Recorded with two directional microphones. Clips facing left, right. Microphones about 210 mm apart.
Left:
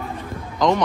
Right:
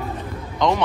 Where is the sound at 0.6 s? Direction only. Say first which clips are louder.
Left 1 dB; centre (ahead or behind).